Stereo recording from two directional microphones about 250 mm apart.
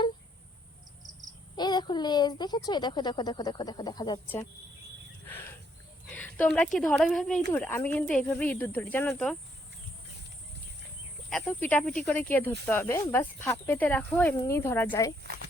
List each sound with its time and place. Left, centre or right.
1.5 s speech: centre
5.2 s cricket: centre
6.1 s a sound: centre
6.7 s speech: centre
11.3 s speech: centre
15.2 s speech: right